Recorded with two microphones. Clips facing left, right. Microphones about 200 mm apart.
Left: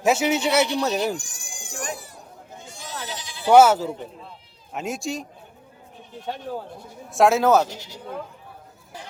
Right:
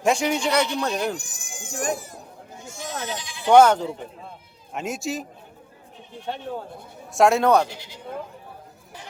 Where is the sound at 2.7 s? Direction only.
45° right (ahead or behind).